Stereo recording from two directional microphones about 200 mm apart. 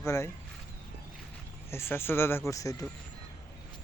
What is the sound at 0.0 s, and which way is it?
Speech, 15° left (ahead or behind).